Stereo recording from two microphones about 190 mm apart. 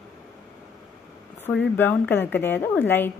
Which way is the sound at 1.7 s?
10° left (ahead or behind).